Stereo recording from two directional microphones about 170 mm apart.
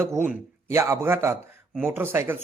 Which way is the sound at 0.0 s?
15° right (ahead or behind).